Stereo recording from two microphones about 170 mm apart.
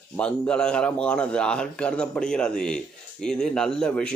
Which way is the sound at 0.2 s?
5° left (ahead or behind).